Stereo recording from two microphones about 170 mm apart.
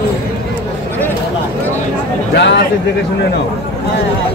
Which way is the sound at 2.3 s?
90° left.